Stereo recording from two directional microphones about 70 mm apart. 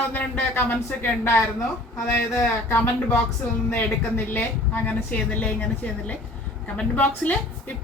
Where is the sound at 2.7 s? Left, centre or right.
Left.